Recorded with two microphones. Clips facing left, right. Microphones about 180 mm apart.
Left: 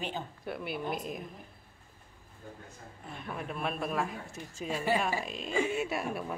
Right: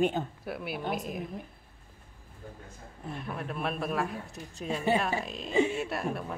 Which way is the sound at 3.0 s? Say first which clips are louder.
Right 3 dB; centre (ahead or behind).